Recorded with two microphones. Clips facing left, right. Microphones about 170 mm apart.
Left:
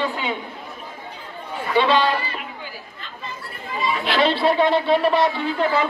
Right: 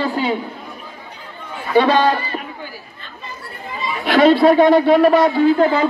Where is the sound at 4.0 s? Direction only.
45° right (ahead or behind).